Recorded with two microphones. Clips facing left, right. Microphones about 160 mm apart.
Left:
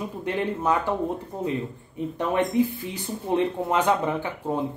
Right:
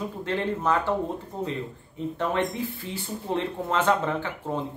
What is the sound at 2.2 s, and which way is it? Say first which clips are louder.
Speech: left 5 dB; 15° left (ahead or behind).